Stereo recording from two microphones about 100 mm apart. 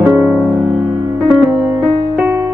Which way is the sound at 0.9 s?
40° right (ahead or behind).